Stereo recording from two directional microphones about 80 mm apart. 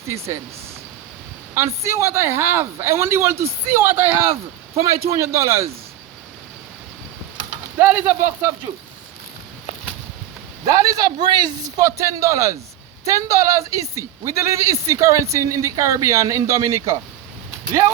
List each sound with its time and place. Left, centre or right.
1.5 s a woman's voice: right
4.8 s a woman's voice: right
7.8 s a woman's voice: right
10.7 s a woman's voice: right